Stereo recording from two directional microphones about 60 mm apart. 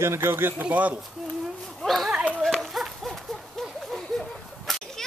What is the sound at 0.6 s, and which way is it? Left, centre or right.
Speech, right.